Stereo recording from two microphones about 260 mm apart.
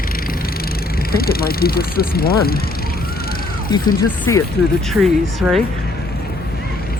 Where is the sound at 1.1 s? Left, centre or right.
Left.